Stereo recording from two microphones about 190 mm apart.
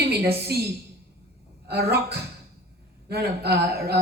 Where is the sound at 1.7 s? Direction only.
60° right (ahead or behind).